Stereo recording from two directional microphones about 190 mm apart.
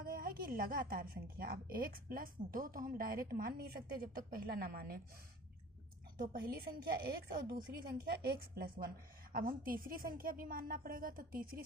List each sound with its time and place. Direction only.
0.0 s a woman's voice: 50° right (ahead or behind)
6.1 s a woman's voice: 50° right (ahead or behind)